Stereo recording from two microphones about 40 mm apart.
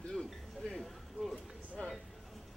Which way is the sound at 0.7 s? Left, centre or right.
Centre.